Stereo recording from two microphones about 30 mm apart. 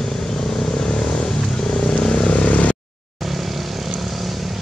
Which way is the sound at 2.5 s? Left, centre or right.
Left.